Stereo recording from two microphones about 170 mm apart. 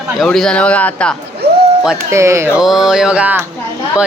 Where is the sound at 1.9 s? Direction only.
15° right (ahead or behind).